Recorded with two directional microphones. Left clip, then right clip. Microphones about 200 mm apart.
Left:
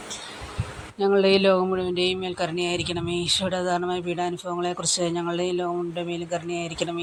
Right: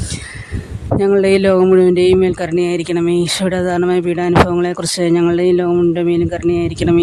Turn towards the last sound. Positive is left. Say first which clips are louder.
# right 13 dB
turn(degrees=-50)  # may be behind; listen again after turning